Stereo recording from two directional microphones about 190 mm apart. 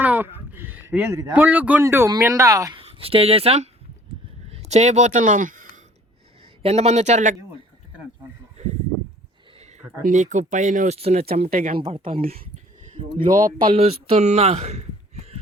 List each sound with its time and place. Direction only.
0.0 s a sound: 10° right (ahead or behind)
0.9 s speech: 15° right (ahead or behind)
2.8 s speech: 30° right (ahead or behind)
6.6 s speech: 35° right (ahead or behind)
9.6 s a sound: 35° right (ahead or behind)
10.0 s speech: 40° right (ahead or behind)
11.5 s speech: 50° right (ahead or behind)
11.8 s speech: 25° right (ahead or behind)
12.2 s speech: 50° right (ahead or behind)
13.7 s speech: 30° right (ahead or behind)